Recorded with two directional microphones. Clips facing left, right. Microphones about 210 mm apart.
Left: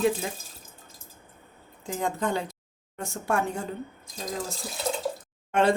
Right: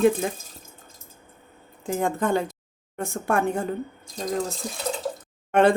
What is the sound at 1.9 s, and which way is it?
A woman's voice, 50° right (ahead or behind).